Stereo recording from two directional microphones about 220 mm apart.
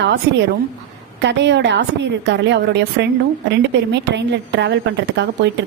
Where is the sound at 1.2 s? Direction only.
55° right (ahead or behind).